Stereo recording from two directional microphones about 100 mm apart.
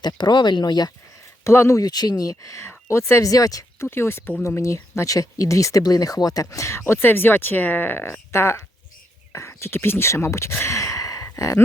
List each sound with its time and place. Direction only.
0.0 s speech: 45° left (ahead or behind)
1.5 s speech: 25° left (ahead or behind)
2.9 s speech: 25° left (ahead or behind)
3.8 s speech: 25° left (ahead or behind)
10.5 s sigh: 25° left (ahead or behind)